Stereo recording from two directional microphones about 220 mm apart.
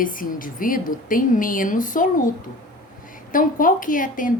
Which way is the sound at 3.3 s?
40° left (ahead or behind).